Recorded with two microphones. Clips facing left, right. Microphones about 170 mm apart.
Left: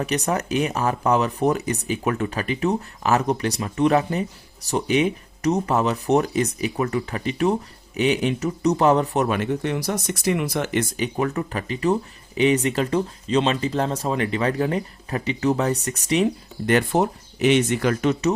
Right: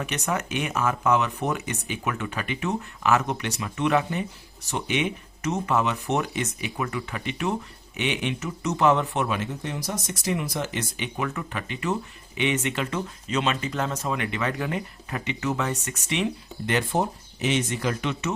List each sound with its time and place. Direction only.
0.0 s speech: 35° left (ahead or behind)
9.4 s speech: 65° left (ahead or behind)
10.9 s speech: 40° left (ahead or behind); by 17.9 s 65° left (ahead or behind)
18.0 s speech: 40° left (ahead or behind)